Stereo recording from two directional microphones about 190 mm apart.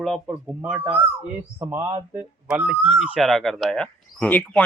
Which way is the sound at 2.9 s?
5° right (ahead or behind).